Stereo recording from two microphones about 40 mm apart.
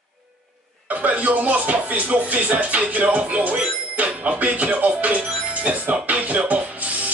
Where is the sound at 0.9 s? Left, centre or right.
Right.